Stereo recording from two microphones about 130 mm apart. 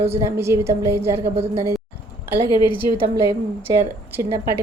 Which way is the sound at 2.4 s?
35° left (ahead or behind).